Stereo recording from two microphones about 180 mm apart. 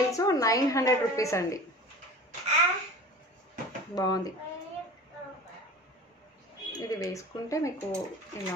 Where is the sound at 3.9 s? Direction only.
20° left (ahead or behind).